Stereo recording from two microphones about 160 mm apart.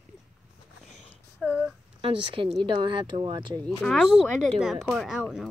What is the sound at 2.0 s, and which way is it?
Speech, 30° right (ahead or behind).